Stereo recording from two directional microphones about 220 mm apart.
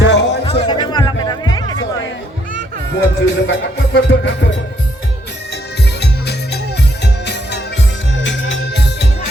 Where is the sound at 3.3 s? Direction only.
50° left (ahead or behind).